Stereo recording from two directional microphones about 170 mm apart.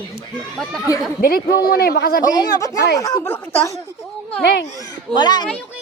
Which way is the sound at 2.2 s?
20° left (ahead or behind).